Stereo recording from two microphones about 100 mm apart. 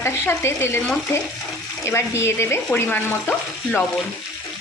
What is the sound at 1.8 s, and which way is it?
Speech, 25° left (ahead or behind).